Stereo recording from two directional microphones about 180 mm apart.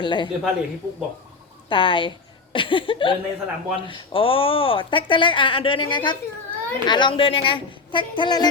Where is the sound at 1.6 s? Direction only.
30° left (ahead or behind).